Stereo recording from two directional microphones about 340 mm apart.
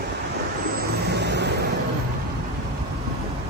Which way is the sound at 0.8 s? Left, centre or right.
Right.